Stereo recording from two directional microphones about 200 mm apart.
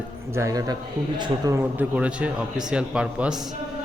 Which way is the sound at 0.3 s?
15° right (ahead or behind).